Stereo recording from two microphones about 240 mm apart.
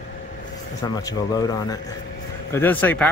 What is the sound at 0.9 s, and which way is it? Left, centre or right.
Speech, centre.